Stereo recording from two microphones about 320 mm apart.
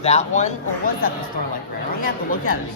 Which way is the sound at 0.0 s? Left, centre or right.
Left.